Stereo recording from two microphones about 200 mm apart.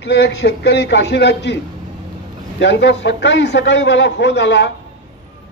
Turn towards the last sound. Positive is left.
turn(degrees=60)  # may be behind; listen again after turning